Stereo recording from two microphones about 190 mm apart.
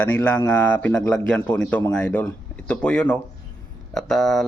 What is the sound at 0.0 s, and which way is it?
Speech, 10° left (ahead or behind).